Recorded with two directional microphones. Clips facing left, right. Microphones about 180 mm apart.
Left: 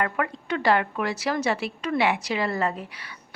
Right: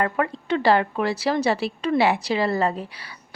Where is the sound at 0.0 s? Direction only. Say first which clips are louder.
Right 3 dB; 30° right (ahead or behind).